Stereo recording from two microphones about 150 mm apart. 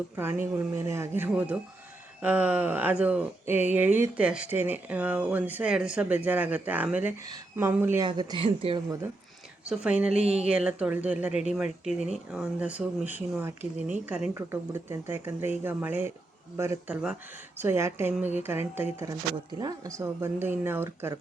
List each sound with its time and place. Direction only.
0.2 s speech: 15° right (ahead or behind)
8.0 s speech: 30° right (ahead or behind)
10.2 s speech: 45° right (ahead or behind)
10.5 s speech: 5° right (ahead or behind)
17.6 s speech: 15° right (ahead or behind)
19.5 s speech: 25° right (ahead or behind)